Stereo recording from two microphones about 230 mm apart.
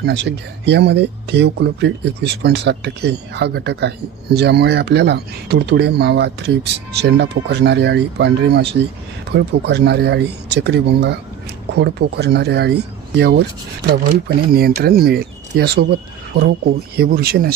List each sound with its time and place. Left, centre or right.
0.0 s speech: right